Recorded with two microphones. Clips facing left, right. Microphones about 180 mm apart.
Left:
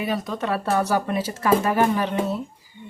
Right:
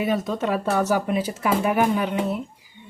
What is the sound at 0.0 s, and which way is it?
Speech, 25° right (ahead or behind).